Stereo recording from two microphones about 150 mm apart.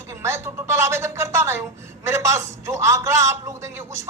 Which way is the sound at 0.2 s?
15° right (ahead or behind).